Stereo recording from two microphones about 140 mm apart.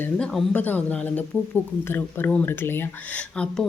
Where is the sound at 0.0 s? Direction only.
5° left (ahead or behind).